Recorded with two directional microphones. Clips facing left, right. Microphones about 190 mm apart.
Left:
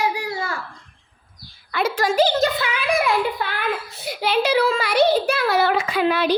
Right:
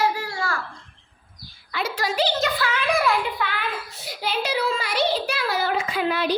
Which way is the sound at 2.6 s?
15° left (ahead or behind).